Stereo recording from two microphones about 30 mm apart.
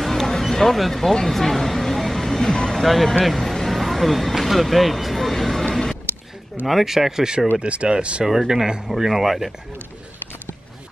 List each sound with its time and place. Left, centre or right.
0.0 s a sound: centre
0.7 s speech: centre
1.2 s a sound: centre
2.5 s speech: centre
2.8 s speech: centre
6.6 s speech: centre
7.6 s speech: right
8.6 s speech: right
9.0 s speech: centre